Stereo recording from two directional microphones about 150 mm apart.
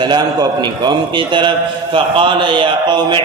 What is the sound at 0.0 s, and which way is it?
A man's voice, 30° right (ahead or behind).